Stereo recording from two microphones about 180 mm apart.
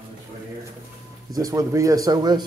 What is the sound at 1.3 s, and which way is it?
Speech, 20° right (ahead or behind).